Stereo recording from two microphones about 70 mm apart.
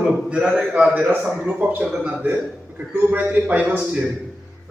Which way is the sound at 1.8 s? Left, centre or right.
Centre.